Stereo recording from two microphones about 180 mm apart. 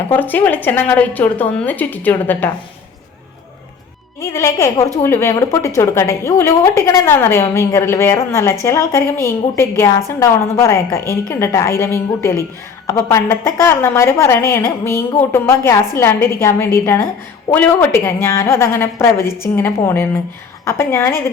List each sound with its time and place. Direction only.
0.1 s a woman's voice: 10° left (ahead or behind)
4.2 s a woman's voice: 15° left (ahead or behind)